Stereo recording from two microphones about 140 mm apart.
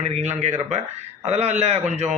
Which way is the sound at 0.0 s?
50° right (ahead or behind).